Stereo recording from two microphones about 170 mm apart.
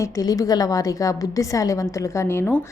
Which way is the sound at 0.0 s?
20° left (ahead or behind).